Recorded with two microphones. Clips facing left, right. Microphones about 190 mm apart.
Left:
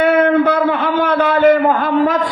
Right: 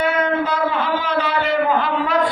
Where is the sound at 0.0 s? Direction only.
60° left (ahead or behind).